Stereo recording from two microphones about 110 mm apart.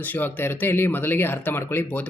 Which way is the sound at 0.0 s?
15° left (ahead or behind).